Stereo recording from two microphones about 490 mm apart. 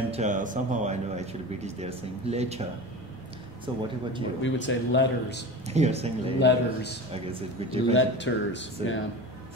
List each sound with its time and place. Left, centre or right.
0.1 s speech: centre
3.7 s speech: centre
4.4 s speech: left
5.7 s speech: centre
6.4 s speech: centre
7.1 s speech: centre
7.9 s speech: left